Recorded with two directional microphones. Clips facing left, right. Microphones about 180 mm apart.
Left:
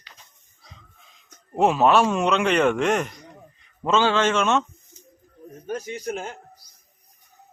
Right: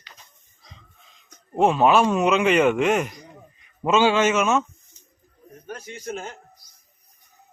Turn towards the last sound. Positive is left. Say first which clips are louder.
# left 3 dB
turn(degrees=10)  # may be behind; listen again after turning